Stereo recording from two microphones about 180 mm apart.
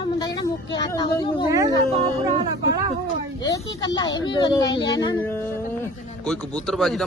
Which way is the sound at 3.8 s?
20° left (ahead or behind).